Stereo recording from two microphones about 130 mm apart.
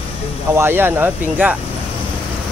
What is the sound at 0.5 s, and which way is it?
Speech, 20° right (ahead or behind).